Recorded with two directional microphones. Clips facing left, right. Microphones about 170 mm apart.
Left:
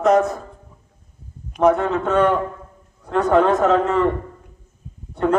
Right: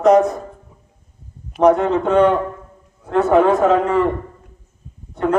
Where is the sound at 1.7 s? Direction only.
15° right (ahead or behind).